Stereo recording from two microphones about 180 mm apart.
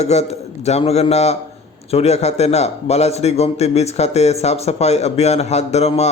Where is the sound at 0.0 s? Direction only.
35° left (ahead or behind).